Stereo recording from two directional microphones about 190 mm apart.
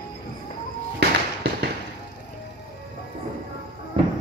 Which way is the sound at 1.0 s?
55° right (ahead or behind).